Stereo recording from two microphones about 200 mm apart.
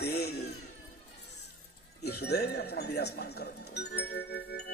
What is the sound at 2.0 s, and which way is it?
Music, 55° left (ahead or behind).